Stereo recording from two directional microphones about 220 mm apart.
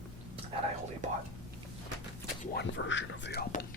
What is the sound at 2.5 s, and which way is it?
Speech, 55° left (ahead or behind).